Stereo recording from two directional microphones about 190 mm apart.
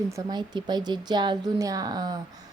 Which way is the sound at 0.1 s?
20° right (ahead or behind).